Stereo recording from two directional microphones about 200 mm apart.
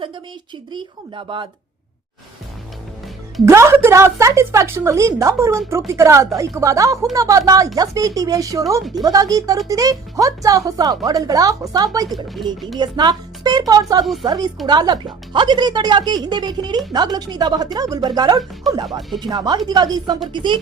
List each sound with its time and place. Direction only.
0.7 s speech: 25° right (ahead or behind)
3.4 s a woman's voice: 15° right (ahead or behind)
12.0 s speech: centre (ahead or behind)
12.8 s speech: 20° right (ahead or behind)
14.0 s speech: centre (ahead or behind)
14.3 s speech: 20° right (ahead or behind)
18.9 s speech: centre (ahead or behind)
19.2 s speech: 20° right (ahead or behind)